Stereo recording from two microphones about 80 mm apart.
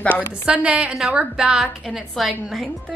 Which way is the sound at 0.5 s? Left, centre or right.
Centre.